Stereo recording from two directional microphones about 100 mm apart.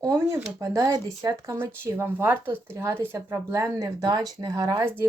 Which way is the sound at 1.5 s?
25° right (ahead or behind).